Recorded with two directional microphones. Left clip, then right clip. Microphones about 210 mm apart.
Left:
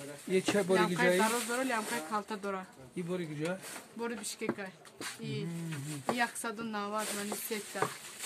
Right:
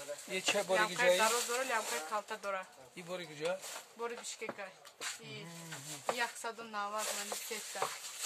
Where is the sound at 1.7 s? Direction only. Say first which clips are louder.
Left 2 dB; 30° left (ahead or behind).